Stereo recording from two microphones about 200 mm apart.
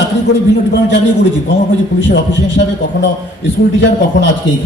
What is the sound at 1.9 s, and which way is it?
A man's voice, 65° left (ahead or behind).